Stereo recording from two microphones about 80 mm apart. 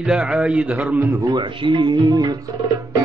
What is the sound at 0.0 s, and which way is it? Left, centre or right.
Speech, centre.